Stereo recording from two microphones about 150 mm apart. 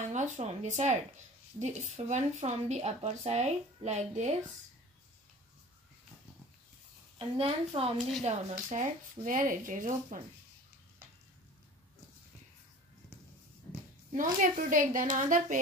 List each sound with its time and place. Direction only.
0.1 s speech: 50° right (ahead or behind)
7.2 s a woman's voice: 40° right (ahead or behind); by 10.2 s 60° right (ahead or behind)
14.1 s speech: 60° right (ahead or behind)